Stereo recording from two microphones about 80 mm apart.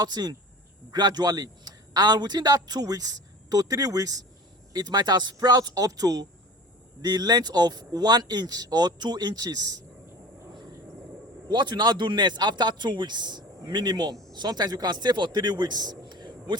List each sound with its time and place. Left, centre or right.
0.0 s a man's voice: right
4.7 s a man's voice: right
11.4 s a man's voice: right
13.6 s a man's voice: right